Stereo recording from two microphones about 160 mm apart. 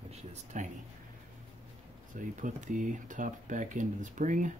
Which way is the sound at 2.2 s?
55° right (ahead or behind).